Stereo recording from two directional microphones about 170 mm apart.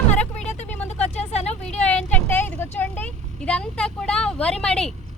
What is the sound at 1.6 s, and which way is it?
Vehicle, 10° left (ahead or behind).